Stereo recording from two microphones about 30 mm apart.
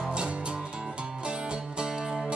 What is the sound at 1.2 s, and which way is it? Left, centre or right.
Music, right.